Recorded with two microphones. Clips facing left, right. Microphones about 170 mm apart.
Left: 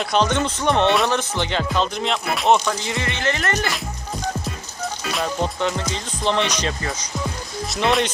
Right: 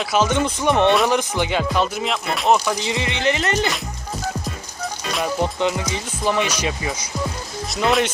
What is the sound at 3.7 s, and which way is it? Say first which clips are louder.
Music: even; centre (ahead or behind).